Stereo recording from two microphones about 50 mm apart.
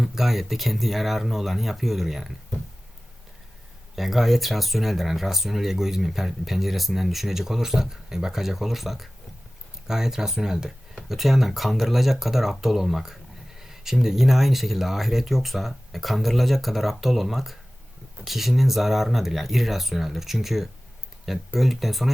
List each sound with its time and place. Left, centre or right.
0.0 s speech: centre
3.9 s speech: centre